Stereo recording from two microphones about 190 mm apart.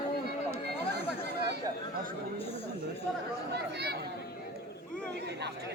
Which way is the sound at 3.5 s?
60° right (ahead or behind).